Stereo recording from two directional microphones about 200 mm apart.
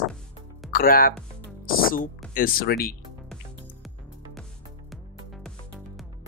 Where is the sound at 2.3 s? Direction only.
45° left (ahead or behind).